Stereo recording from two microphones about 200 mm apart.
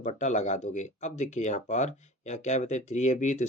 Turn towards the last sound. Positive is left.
turn(degrees=35)  # may be behind; listen again after turning